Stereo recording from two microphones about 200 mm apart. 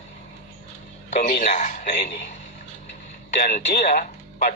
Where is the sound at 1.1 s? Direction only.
40° left (ahead or behind).